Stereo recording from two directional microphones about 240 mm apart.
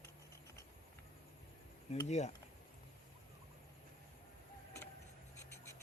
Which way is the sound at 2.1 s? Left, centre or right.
Left.